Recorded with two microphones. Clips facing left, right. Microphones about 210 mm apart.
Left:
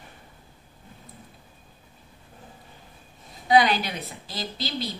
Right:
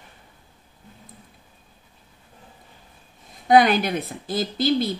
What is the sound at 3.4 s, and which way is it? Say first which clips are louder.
A woman's voice: right 4 dB; 50° right (ahead or behind).